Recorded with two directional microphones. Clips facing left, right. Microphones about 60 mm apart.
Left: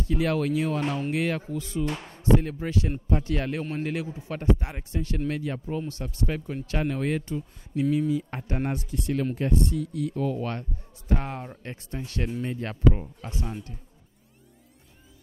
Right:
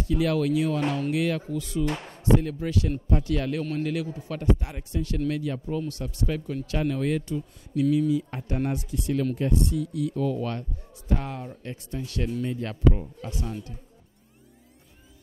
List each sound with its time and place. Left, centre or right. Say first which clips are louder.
0.1 s a man's voice: right 1 dB; left